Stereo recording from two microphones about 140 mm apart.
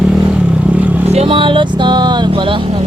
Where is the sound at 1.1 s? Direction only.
40° right (ahead or behind).